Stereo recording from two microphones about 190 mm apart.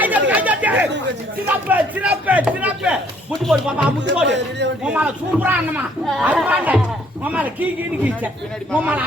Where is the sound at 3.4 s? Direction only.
Centre (ahead or behind).